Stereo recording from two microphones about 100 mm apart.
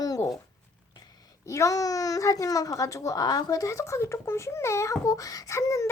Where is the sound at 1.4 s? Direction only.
30° left (ahead or behind).